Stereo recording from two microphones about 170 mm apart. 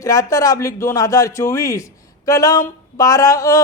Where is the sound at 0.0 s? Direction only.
20° left (ahead or behind).